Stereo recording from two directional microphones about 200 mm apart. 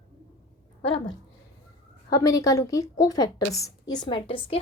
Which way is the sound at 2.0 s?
20° left (ahead or behind).